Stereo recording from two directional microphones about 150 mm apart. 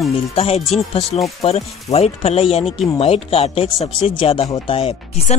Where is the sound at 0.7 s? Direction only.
40° left (ahead or behind).